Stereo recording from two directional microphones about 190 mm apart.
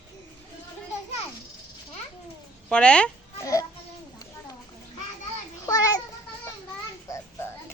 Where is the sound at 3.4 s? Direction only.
15° left (ahead or behind).